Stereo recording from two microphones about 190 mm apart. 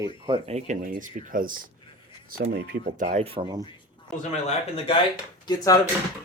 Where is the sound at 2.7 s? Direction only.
40° right (ahead or behind).